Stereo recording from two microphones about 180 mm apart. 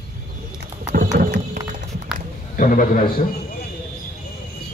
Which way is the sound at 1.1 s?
70° right (ahead or behind).